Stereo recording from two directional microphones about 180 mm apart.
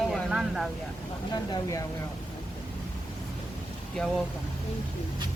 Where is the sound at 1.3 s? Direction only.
20° left (ahead or behind).